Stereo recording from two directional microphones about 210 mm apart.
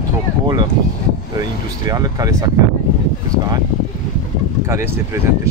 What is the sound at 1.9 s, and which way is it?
Speech, 15° right (ahead or behind).